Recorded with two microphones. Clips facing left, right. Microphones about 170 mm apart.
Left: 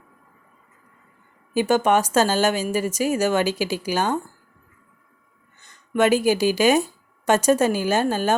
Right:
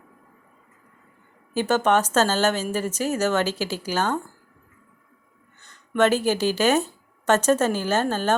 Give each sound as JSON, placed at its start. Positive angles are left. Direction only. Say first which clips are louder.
{"t": 1.5, "sound": "a woman's voice", "louder": "left 2 dB", "side_deg": 10}
{"t": 5.5, "sound": "speech", "louder": "even", "side_deg": 10}